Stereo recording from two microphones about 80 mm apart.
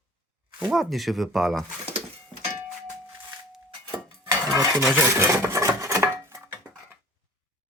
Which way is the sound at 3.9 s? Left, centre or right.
Right.